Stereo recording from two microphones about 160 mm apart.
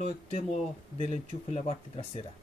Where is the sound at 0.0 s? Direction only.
40° left (ahead or behind).